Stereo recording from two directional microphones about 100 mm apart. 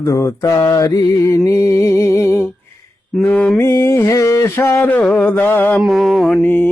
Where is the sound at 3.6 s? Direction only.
30° left (ahead or behind).